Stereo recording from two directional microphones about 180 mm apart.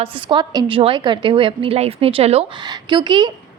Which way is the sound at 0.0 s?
25° right (ahead or behind).